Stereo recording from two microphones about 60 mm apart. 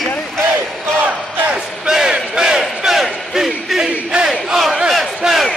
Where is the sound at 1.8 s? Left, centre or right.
Centre.